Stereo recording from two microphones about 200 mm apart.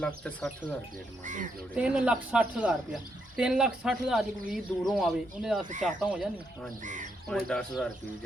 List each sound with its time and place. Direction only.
0.0 s a woman's voice: 5° left (ahead or behind)
1.2 s speech: 40° right (ahead or behind)
1.7 s a woman's voice: 5° right (ahead or behind)
5.6 s speech: 40° right (ahead or behind)
6.0 s a woman's voice: 5° right (ahead or behind)
6.8 s speech: 40° right (ahead or behind)
7.3 s a woman's voice: centre (ahead or behind)